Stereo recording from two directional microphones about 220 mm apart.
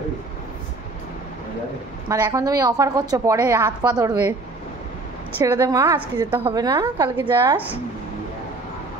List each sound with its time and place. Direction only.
2.0 s a woman's voice: 15° right (ahead or behind)
5.4 s a woman's voice: 15° right (ahead or behind)